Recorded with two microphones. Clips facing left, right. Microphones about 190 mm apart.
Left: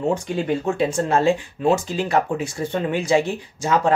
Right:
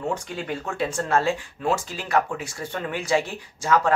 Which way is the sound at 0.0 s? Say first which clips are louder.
Left 7 dB; 25° left (ahead or behind).